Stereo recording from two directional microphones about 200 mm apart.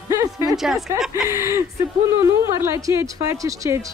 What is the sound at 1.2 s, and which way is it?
Speech, 15° right (ahead or behind).